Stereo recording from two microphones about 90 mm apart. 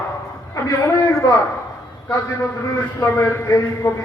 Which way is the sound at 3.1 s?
35° left (ahead or behind).